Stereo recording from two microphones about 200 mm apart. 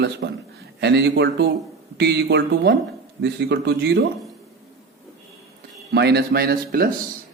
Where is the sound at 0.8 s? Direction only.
60° right (ahead or behind).